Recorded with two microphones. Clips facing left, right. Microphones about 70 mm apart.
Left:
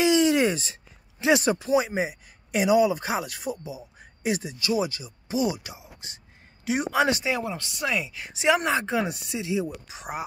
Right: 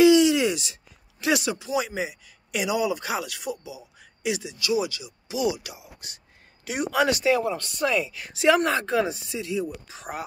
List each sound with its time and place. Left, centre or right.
0.0 s a sound: left
1.4 s speech: left; by 9.0 s centre
9.0 s speech: centre
9.4 s speech: centre